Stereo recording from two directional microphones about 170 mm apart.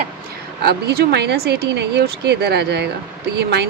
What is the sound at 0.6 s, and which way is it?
A woman's voice, 70° right (ahead or behind).